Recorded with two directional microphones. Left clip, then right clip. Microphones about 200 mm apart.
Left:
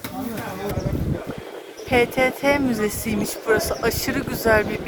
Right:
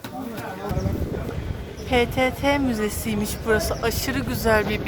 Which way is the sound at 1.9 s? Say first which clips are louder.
Left 2 dB; 5° left (ahead or behind).